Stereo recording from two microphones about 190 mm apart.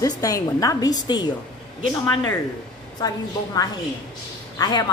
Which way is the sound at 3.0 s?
20° left (ahead or behind).